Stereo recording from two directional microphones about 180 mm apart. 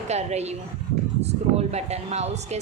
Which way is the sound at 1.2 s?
35° right (ahead or behind).